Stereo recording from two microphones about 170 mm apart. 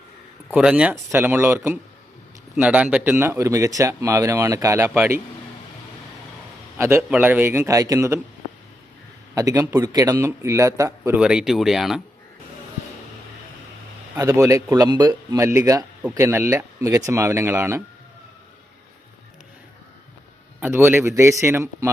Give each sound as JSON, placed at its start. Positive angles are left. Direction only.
{"t": 0.5, "sound": "speech", "side_deg": -5}
{"t": 6.7, "sound": "a man's voice", "side_deg": -15}
{"t": 9.3, "sound": "speech", "side_deg": -20}
{"t": 11.2, "sound": "speech", "side_deg": -5}
{"t": 14.2, "sound": "speech", "side_deg": -15}
{"t": 20.6, "sound": "speech", "side_deg": -15}